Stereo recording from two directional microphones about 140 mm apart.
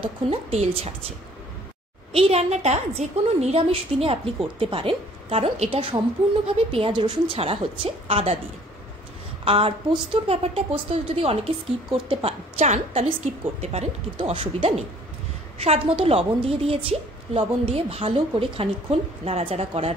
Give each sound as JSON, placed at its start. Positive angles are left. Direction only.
{"t": 0.0, "sound": "speech", "side_deg": -45}
{"t": 2.1, "sound": "a woman's voice", "side_deg": -45}
{"t": 9.4, "sound": "a woman's voice", "side_deg": -45}